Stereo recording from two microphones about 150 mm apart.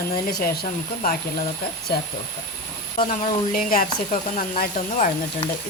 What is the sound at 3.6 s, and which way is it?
Speech, 70° left (ahead or behind).